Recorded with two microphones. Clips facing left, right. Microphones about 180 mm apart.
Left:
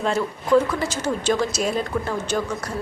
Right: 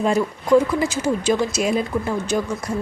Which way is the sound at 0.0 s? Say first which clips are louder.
Right 3 dB; 10° right (ahead or behind).